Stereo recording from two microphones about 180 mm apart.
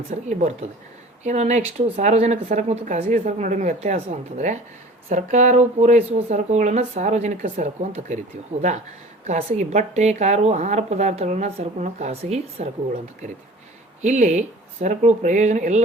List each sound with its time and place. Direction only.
0.1 s a woman's voice: 40° right (ahead or behind)
9.2 s a woman's voice: 40° right (ahead or behind)
14.0 s a woman's voice: 40° right (ahead or behind)